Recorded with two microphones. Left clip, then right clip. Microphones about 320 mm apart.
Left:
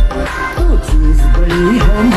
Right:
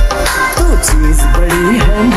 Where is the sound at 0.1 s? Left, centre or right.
Right.